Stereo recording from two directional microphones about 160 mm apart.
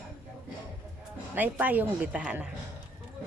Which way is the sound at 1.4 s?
10° right (ahead or behind).